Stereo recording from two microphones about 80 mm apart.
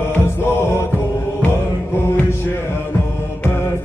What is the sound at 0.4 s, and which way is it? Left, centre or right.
Music, left.